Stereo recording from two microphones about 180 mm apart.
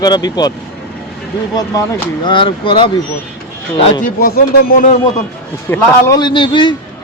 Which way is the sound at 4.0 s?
50° left (ahead or behind).